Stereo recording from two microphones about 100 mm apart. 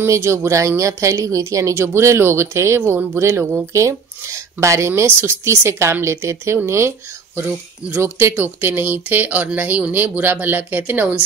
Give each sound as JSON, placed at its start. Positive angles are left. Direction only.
{"t": 0.0, "sound": "speech", "side_deg": -25}
{"t": 7.9, "sound": "speech", "side_deg": -25}